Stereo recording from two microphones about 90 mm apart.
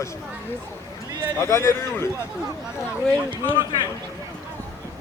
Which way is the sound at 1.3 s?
30° left (ahead or behind).